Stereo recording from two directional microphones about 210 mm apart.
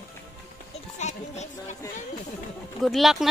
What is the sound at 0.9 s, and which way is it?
Music, 35° left (ahead or behind).